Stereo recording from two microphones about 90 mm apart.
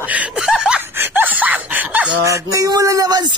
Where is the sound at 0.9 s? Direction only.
20° right (ahead or behind).